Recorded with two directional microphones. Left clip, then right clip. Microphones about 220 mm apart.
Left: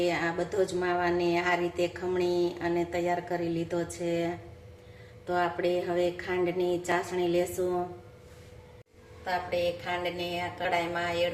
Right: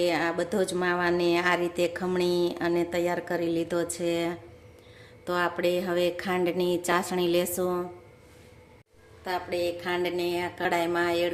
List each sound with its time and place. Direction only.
0.0 s speech: 50° right (ahead or behind)
9.8 s speech: 50° right (ahead or behind)